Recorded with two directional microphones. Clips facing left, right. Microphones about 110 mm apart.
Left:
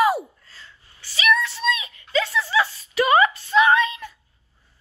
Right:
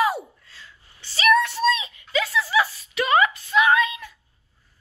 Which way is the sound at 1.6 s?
30° right (ahead or behind).